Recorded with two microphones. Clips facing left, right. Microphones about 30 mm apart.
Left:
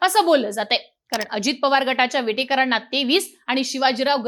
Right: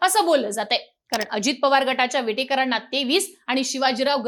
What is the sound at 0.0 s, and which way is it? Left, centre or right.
A woman's voice, centre.